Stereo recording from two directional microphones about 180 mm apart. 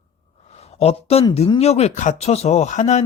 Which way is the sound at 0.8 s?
35° left (ahead or behind).